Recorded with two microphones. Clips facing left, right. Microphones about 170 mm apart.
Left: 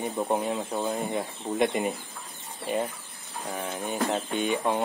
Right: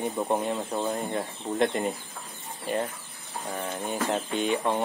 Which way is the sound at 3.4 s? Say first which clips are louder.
Even; centre (ahead or behind).